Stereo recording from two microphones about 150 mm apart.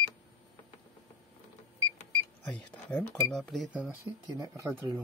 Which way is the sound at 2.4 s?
10° left (ahead or behind).